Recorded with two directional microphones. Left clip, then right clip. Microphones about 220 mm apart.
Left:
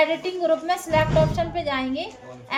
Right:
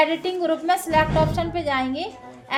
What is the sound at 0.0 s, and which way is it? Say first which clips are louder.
A woman's voice: right 1 dB; 35° right (ahead or behind).